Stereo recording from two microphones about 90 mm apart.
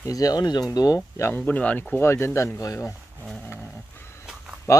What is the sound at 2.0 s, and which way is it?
Speech, 30° left (ahead or behind).